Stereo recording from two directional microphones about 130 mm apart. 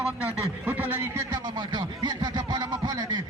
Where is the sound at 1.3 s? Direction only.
35° right (ahead or behind).